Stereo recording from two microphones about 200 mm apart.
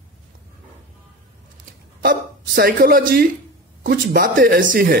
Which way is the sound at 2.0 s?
50° right (ahead or behind).